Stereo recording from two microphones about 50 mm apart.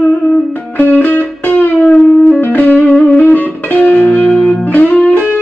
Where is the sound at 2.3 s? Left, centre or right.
Left.